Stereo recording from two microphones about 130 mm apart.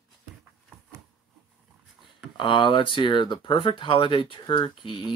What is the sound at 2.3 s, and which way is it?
Speech, 40° left (ahead or behind).